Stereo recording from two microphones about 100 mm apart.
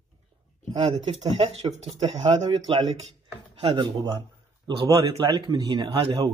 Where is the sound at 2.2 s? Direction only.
45° right (ahead or behind).